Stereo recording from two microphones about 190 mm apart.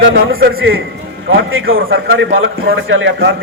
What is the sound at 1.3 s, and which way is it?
A man's voice, 90° right.